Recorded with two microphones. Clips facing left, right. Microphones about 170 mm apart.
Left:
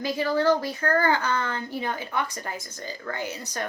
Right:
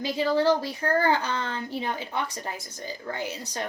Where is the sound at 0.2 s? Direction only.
20° right (ahead or behind).